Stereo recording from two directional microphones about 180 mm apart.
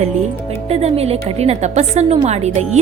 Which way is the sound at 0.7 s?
35° right (ahead or behind).